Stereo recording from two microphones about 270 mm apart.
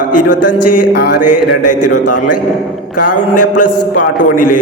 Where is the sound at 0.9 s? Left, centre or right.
Left.